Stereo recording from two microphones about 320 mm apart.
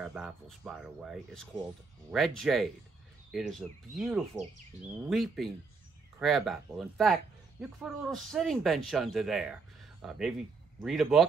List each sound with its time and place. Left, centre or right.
0.0 s speech: centre